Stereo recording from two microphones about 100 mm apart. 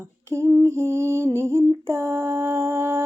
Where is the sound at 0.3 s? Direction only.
30° right (ahead or behind).